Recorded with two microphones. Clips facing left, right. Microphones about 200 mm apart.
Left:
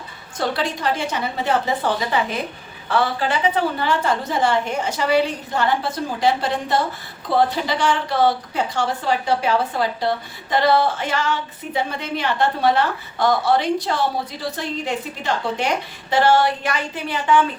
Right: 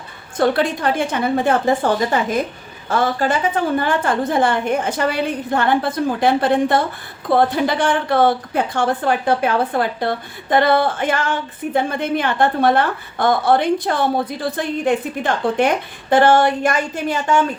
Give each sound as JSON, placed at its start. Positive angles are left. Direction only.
{"t": 0.3, "sound": "a woman's voice", "side_deg": -55}